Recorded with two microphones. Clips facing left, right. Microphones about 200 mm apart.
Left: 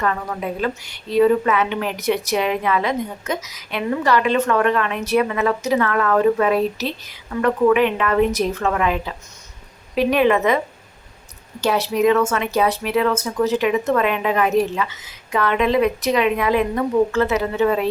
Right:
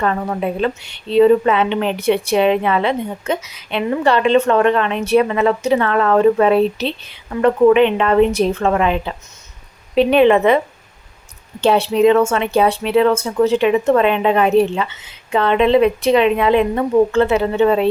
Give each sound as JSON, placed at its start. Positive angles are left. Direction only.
{"t": 0.0, "sound": "a woman's voice", "side_deg": -30}
{"t": 11.6, "sound": "a woman's voice", "side_deg": -30}